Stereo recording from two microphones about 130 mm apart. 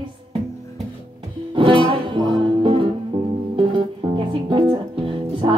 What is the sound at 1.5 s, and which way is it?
Music, 40° right (ahead or behind).